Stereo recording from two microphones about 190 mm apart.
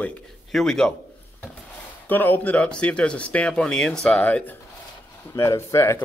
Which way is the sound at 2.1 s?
10° left (ahead or behind).